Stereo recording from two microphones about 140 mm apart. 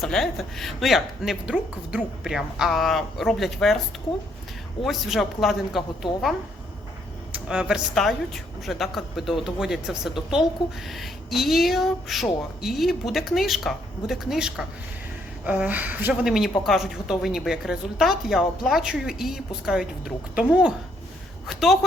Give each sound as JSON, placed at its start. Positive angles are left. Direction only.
{"t": 0.0, "sound": "speech", "side_deg": 5}
{"t": 4.8, "sound": "speech", "side_deg": 0}
{"t": 7.3, "sound": "a woman's voice", "side_deg": -5}
{"t": 16.2, "sound": "speech", "side_deg": 0}